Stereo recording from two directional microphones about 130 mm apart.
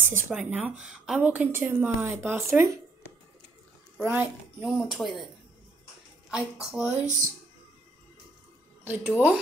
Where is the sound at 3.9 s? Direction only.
15° right (ahead or behind).